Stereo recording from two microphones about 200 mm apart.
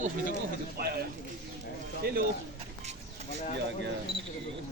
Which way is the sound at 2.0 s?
50° right (ahead or behind).